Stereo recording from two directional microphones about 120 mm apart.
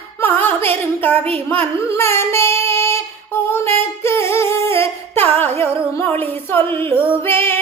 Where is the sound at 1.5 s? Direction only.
20° left (ahead or behind).